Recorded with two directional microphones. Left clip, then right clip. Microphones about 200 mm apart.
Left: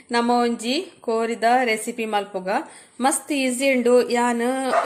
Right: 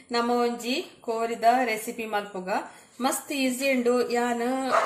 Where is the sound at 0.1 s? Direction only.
45° left (ahead or behind).